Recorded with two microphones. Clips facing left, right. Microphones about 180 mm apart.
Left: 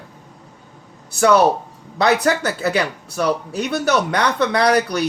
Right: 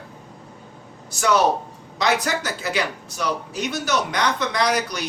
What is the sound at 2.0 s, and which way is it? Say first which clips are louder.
Speech: left 5 dB; 60° left (ahead or behind).